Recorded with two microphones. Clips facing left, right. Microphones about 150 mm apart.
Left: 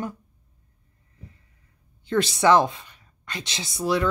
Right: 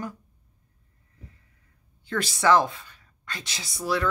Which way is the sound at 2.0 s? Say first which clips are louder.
Left 4 dB; 20° left (ahead or behind).